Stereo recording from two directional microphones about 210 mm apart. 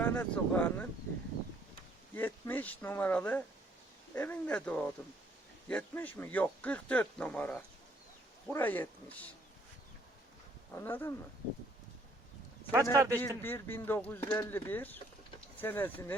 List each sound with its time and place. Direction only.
0.0 s speech: 5° left (ahead or behind)
2.1 s speech: 10° left (ahead or behind)
10.7 s speech: 10° left (ahead or behind)
12.7 s speech: 15° right (ahead or behind)
13.1 s speech: 10° left (ahead or behind)